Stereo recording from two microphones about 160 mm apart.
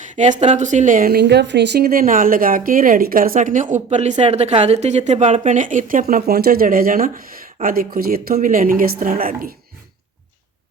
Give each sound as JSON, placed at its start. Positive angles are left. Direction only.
{"t": 0.2, "sound": "a woman's voice", "side_deg": -45}